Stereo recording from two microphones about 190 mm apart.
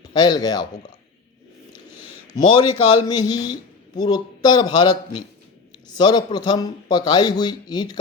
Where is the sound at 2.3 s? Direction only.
20° left (ahead or behind).